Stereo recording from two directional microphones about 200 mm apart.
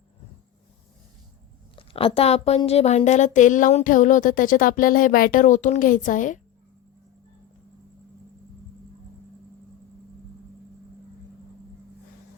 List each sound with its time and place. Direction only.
1.7 s a woman's voice: 25° left (ahead or behind)